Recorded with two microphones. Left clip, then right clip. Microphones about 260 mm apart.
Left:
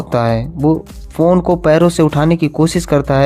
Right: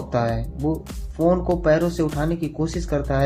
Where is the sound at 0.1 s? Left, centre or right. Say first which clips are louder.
Left 8 dB; left.